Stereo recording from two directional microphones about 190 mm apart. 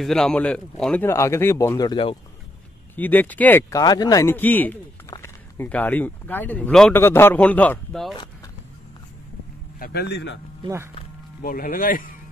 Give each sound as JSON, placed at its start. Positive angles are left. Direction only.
{"t": 0.0, "sound": "a man's voice", "side_deg": 0}
{"t": 3.0, "sound": "a man's voice", "side_deg": 10}
{"t": 3.8, "sound": "a man's voice", "side_deg": 20}
{"t": 9.8, "sound": "a man's voice", "side_deg": 55}
{"t": 11.4, "sound": "speech", "side_deg": 45}